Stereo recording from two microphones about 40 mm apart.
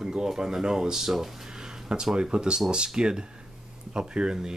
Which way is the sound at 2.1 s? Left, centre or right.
Right.